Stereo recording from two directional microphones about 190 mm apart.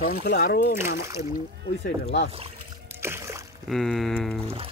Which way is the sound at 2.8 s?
15° right (ahead or behind).